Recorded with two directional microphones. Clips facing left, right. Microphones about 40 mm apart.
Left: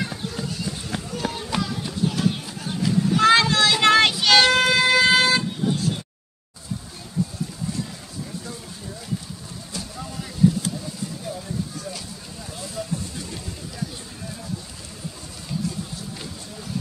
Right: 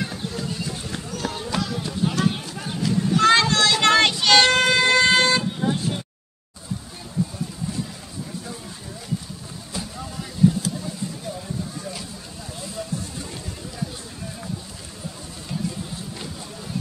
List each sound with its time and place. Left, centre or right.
0.0 s run: centre
2.6 s children playing: centre
5.6 s vehicle: right
9.7 s vehicle: centre
11.3 s a sound: centre
12.8 s a sound: centre